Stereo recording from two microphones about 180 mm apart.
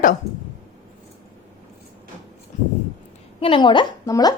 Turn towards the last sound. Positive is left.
turn(degrees=20)  # may be behind; listen again after turning